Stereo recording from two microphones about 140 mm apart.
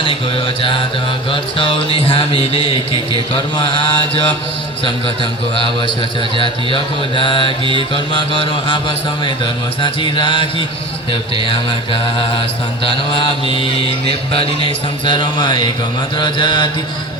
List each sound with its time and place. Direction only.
0.4 s mantra: 35° left (ahead or behind)
5.5 s mantra: 35° left (ahead or behind)
11.4 s mantra: 35° left (ahead or behind)